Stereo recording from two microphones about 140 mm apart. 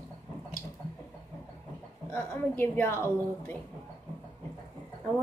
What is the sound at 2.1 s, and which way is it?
Speech, 15° left (ahead or behind).